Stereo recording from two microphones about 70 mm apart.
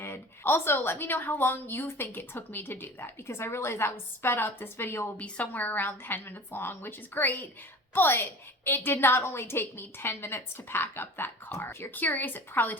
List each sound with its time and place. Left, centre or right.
0.0 s a woman's voice: left
5.1 s a woman's voice: left